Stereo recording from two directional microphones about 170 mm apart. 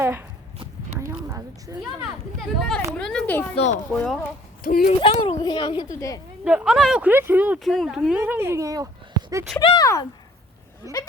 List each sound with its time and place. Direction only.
0.0 s walk: 15° right (ahead or behind)
0.9 s a sound: 15° right (ahead or behind)
2.6 s a sound: 5° left (ahead or behind)
3.5 s speech: 40° left (ahead or behind)
3.9 s speech: 5° left (ahead or behind)
4.6 s speech: 60° left (ahead or behind)
4.9 s a woman's voice: 30° left (ahead or behind)
6.4 s speech: 5° right (ahead or behind)
9.6 s a woman's voice: 25° left (ahead or behind)